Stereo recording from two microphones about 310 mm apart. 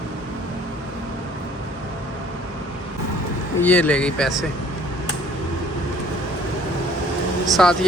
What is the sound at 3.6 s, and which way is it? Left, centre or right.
Speech, centre.